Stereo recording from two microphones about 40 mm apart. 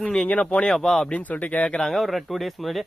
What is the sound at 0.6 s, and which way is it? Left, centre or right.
Speech, centre.